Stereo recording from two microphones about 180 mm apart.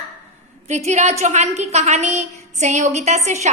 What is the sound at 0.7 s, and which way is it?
A woman's voice, 40° right (ahead or behind).